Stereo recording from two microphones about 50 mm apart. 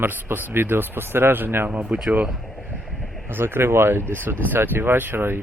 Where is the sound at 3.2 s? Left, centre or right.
Right.